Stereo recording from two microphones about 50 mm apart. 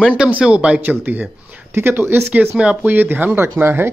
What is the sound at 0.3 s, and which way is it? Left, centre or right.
Speech, right.